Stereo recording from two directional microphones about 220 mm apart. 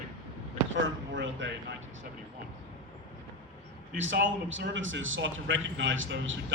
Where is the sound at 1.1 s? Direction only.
55° right (ahead or behind).